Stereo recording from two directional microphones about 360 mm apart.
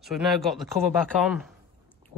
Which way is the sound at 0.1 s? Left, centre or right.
Centre.